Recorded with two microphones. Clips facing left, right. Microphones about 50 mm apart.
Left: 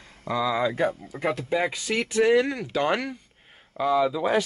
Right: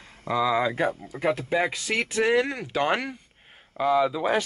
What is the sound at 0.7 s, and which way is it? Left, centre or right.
Speech, centre.